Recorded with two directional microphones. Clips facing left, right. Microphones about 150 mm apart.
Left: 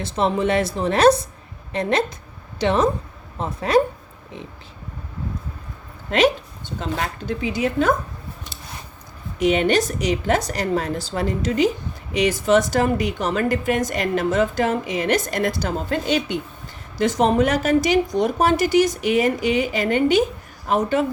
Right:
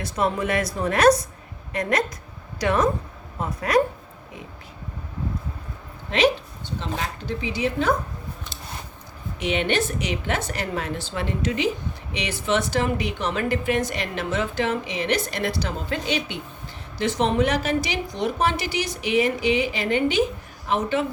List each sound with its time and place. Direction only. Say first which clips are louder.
0.0 s speech: left 4 dB; 25° left (ahead or behind)
6.1 s a woman's voice: left 2 dB; 50° left (ahead or behind)
9.4 s a woman's voice: left 5 dB; 40° left (ahead or behind)